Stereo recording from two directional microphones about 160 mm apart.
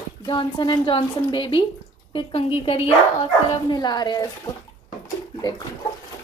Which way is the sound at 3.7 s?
25° left (ahead or behind).